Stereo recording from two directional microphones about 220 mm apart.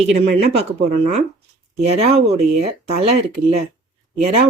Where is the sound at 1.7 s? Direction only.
30° right (ahead or behind).